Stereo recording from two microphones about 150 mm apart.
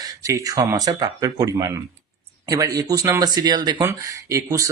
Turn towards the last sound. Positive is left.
turn(degrees=-20)  # may be behind; listen again after turning